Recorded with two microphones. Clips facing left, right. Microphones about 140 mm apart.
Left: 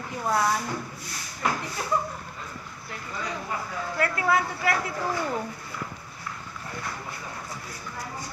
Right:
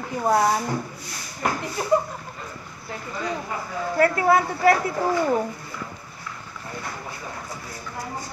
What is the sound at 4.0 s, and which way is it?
Speech, 35° right (ahead or behind).